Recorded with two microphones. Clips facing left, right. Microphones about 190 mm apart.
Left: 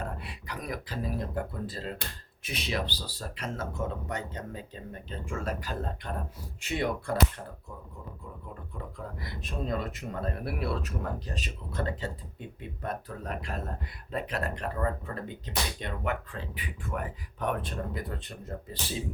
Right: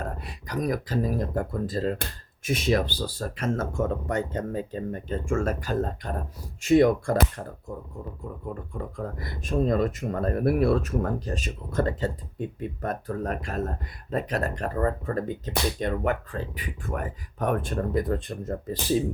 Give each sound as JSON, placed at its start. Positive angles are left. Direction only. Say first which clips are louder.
{"t": 0.0, "sound": "speech", "louder": "right 3 dB", "side_deg": -40}
{"t": 9.0, "sound": "speech", "louder": "right 6 dB", "side_deg": -45}